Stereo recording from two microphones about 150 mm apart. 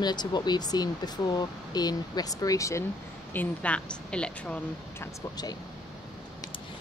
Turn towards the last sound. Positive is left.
turn(degrees=25)  # may be behind; listen again after turning